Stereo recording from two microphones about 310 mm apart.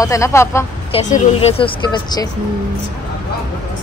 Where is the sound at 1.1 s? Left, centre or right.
Centre.